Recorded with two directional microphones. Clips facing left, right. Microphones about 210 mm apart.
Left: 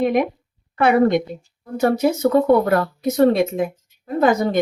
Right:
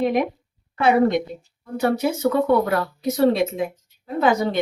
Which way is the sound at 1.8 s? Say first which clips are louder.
Left 3 dB; 45° left (ahead or behind).